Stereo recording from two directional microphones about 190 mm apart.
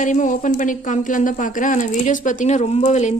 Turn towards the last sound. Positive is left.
turn(degrees=40)  # may be behind; listen again after turning